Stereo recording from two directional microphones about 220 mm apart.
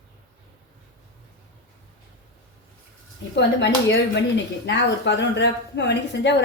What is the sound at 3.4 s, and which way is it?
A woman's voice, 50° left (ahead or behind).